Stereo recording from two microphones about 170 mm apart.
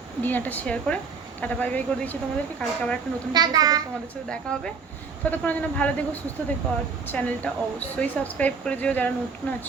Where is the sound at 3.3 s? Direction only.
25° right (ahead or behind).